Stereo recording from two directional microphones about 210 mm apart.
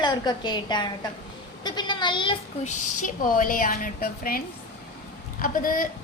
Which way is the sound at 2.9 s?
40° left (ahead or behind).